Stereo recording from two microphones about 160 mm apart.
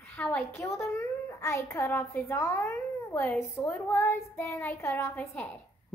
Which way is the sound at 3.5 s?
15° left (ahead or behind).